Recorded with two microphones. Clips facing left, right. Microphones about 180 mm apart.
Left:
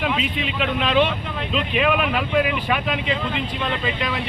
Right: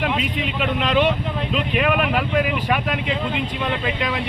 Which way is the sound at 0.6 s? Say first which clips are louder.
Even; 10° right (ahead or behind).